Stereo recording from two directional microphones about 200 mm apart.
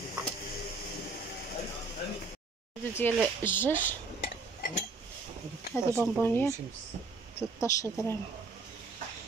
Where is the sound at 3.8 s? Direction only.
40° left (ahead or behind).